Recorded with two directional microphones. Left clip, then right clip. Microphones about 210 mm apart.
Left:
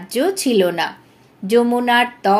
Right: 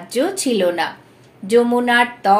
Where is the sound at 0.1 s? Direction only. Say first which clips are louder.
Left 2 dB; 45° left (ahead or behind).